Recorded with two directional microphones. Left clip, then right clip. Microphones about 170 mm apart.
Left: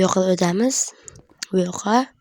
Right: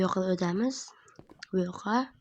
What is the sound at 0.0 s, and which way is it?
Speech, 50° left (ahead or behind).